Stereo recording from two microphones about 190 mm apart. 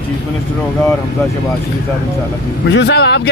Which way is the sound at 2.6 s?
65° left (ahead or behind).